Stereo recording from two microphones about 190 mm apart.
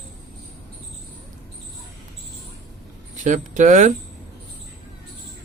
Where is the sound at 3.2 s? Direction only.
40° right (ahead or behind).